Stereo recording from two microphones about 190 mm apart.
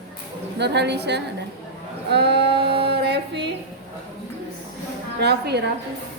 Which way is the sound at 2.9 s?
60° right (ahead or behind).